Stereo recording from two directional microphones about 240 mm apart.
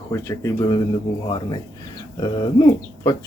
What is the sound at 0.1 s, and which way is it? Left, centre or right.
Speech, centre.